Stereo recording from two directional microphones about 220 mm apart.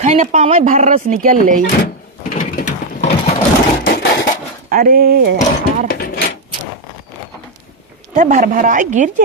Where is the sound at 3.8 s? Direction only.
50° left (ahead or behind).